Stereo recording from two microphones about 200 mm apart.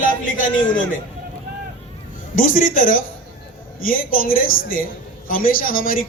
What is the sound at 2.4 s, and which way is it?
A man's voice, 40° left (ahead or behind).